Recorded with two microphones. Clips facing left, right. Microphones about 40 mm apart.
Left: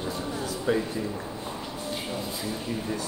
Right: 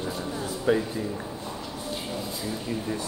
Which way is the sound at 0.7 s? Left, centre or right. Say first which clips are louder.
Right 2 dB; right.